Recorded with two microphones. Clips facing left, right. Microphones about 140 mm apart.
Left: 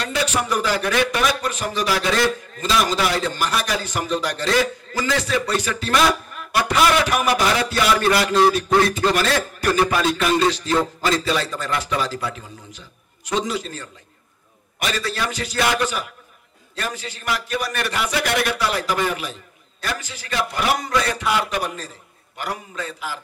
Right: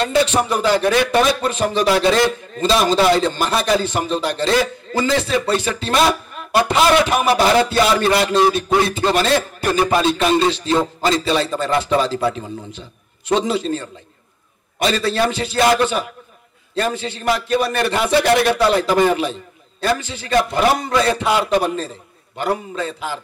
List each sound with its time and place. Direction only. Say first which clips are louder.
0.0 s speech: right 7 dB; 25° right (ahead or behind)